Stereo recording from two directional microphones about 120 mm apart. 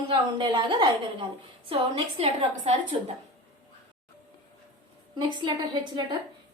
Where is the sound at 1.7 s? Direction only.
55° right (ahead or behind).